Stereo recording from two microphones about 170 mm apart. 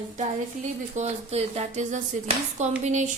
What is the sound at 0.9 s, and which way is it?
A woman's voice, 40° right (ahead or behind).